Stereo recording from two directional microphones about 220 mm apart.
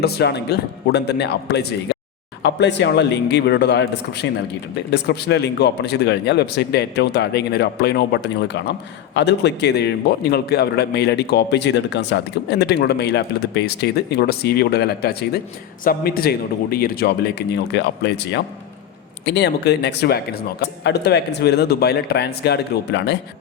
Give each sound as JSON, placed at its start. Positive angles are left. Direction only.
{"t": 0.0, "sound": "a man's voice", "side_deg": 50}